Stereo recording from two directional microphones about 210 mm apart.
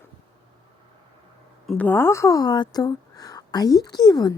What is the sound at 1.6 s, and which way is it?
Speech, 5° left (ahead or behind).